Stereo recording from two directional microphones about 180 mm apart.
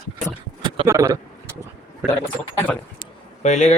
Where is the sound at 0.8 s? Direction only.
15° right (ahead or behind).